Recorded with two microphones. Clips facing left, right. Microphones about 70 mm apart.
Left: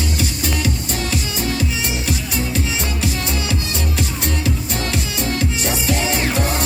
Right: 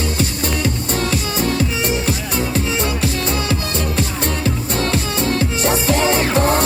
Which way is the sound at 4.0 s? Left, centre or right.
Right.